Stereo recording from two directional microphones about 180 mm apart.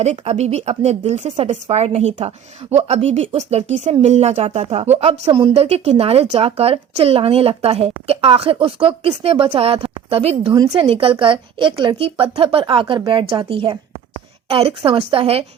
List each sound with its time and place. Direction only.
0.0 s a woman's voice: 35° right (ahead or behind)